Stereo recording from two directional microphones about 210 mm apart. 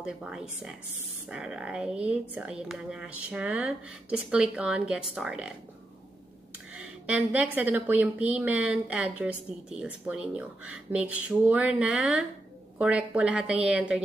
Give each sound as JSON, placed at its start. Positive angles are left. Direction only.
{"t": 0.0, "sound": "a woman's voice", "side_deg": -5}
{"t": 6.7, "sound": "a woman's voice", "side_deg": -5}